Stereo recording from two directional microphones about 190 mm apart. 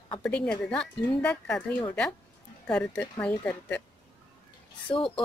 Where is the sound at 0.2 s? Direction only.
5° left (ahead or behind).